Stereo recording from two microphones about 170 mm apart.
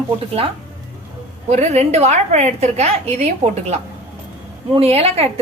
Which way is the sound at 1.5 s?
40° right (ahead or behind).